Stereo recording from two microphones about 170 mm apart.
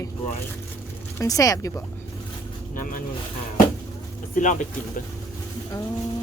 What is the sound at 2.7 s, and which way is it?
Vehicle, 50° left (ahead or behind).